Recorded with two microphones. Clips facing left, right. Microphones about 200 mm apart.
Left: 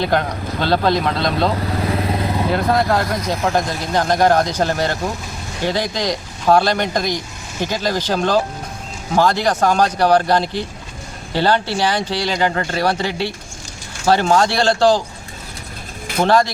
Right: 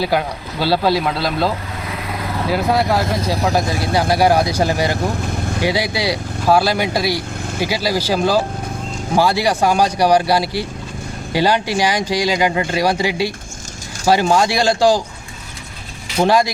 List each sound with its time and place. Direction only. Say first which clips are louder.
0.0 s speech: even; 10° right (ahead or behind)
1.9 s vehicle: left 2 dB; 35° left (ahead or behind)
2.5 s speech: right 1 dB; 5° right (ahead or behind)
16.2 s speech: even; 10° right (ahead or behind)